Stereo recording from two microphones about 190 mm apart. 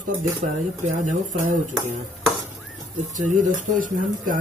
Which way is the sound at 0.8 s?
40° right (ahead or behind).